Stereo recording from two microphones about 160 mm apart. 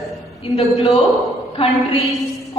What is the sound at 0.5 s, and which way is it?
Speech, 40° left (ahead or behind).